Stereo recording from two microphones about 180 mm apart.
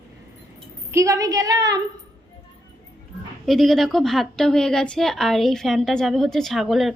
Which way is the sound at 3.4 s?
Centre (ahead or behind).